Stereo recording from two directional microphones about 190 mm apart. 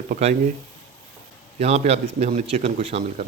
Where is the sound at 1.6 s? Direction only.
35° right (ahead or behind).